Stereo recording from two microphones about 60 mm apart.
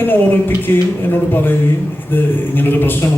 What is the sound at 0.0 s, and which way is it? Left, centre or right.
Speech, left.